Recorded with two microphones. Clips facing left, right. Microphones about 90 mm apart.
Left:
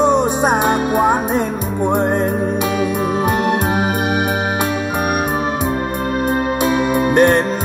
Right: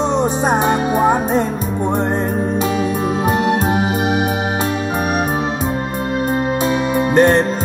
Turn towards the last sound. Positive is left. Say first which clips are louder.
# even
turn(degrees=10)  # may be behind; listen again after turning